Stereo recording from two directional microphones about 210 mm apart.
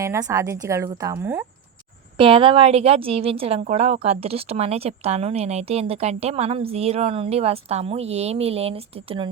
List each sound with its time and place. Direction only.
0.0 s a woman's voice: 15° right (ahead or behind)
2.1 s a woman's voice: 25° right (ahead or behind)